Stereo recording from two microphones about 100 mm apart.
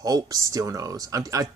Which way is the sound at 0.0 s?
40° right (ahead or behind).